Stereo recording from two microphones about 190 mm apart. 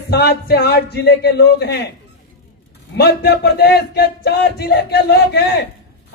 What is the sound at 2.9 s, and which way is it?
A man's voice, 60° left (ahead or behind).